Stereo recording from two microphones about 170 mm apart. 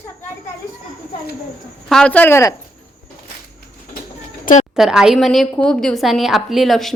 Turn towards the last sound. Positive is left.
turn(degrees=0)  # may be behind; listen again after turning